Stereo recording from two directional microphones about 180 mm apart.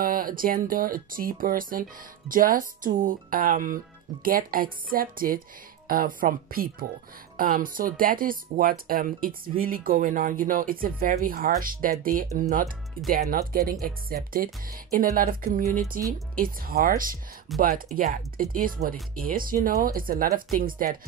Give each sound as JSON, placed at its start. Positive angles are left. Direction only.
{"t": 0.0, "sound": "speech", "side_deg": -50}